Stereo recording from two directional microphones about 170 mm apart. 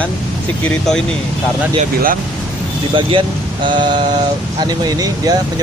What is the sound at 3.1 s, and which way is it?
Speech, 30° right (ahead or behind).